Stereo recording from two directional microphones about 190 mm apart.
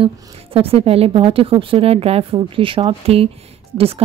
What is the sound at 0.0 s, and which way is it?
A woman's voice, 30° right (ahead or behind).